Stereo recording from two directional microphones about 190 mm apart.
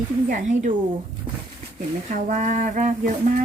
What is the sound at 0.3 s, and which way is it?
Speech, 40° right (ahead or behind).